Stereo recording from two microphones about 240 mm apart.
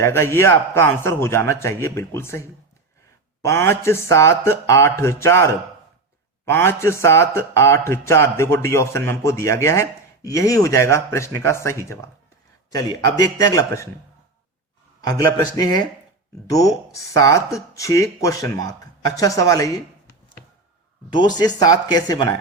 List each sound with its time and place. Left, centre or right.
0.0 s speech: centre
6.5 s speech: centre
15.0 s speech: centre
21.1 s speech: centre